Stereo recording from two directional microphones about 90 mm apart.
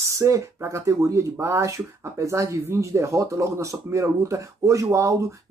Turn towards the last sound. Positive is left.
turn(degrees=-35)  # may be behind; listen again after turning